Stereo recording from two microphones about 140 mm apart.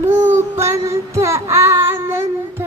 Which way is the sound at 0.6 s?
20° right (ahead or behind).